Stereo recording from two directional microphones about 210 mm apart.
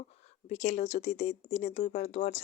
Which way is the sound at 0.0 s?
30° left (ahead or behind).